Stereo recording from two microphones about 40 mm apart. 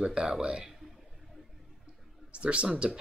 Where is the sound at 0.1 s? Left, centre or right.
Right.